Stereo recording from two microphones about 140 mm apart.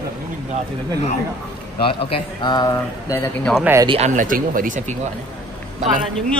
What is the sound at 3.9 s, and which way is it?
Speech, 55° right (ahead or behind).